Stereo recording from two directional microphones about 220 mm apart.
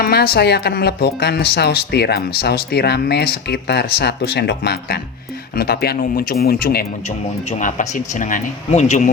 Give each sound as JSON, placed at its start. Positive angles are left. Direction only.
{"t": 0.0, "sound": "speech", "side_deg": 45}